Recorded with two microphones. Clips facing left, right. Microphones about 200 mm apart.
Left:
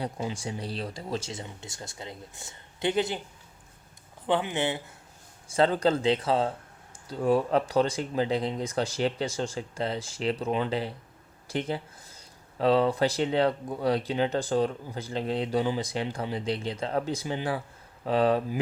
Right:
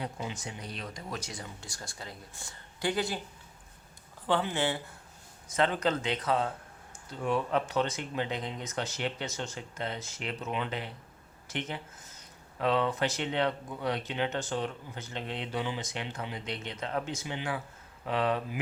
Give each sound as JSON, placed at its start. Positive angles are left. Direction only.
{"t": 0.0, "sound": "speech", "side_deg": 35}
{"t": 4.3, "sound": "speech", "side_deg": 20}
{"t": 5.5, "sound": "speech", "side_deg": 30}